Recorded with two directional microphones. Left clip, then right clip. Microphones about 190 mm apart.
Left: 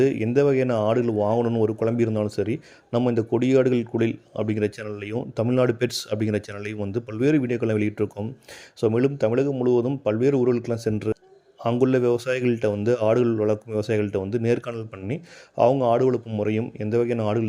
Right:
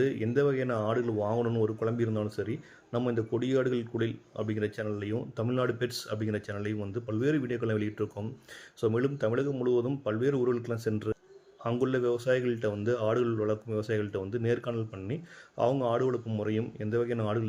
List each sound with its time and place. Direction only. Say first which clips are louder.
0.0 s a man's voice: left 7 dB; 35° left (ahead or behind)